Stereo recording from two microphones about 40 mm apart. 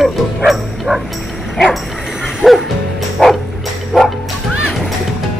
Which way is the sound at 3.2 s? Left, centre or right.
Centre.